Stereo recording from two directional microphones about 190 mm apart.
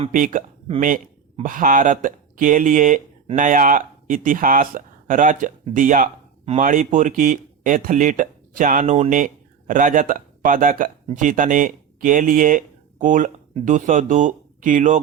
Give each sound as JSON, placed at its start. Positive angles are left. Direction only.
{"t": 0.1, "sound": "speech", "side_deg": -45}